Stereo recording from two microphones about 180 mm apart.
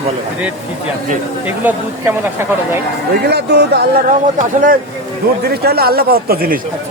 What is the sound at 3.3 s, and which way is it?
Speech, 65° right (ahead or behind).